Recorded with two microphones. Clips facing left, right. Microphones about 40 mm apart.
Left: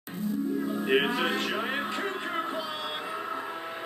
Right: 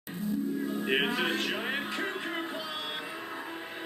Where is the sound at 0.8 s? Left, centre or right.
Centre.